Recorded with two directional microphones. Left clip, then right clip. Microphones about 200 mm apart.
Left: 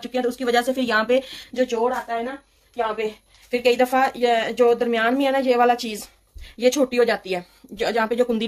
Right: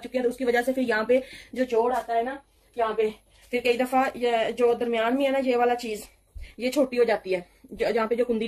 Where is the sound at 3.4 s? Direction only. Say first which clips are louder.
Left 6 dB; 50° left (ahead or behind).